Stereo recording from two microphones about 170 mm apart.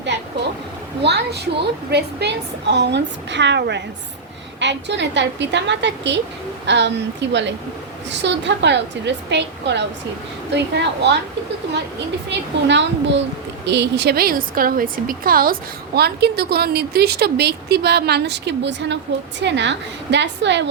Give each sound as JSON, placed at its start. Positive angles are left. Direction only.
{"t": 1.0, "sound": "a woman's voice", "side_deg": -80}
{"t": 12.3, "sound": "a woman's voice", "side_deg": -90}
{"t": 16.0, "sound": "a woman's voice", "side_deg": -70}